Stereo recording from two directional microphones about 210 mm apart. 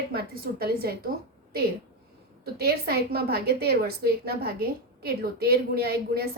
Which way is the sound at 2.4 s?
50° right (ahead or behind).